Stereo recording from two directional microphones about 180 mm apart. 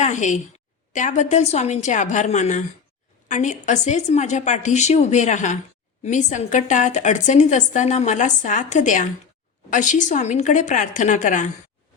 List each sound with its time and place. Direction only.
0.0 s a woman's voice: 40° left (ahead or behind)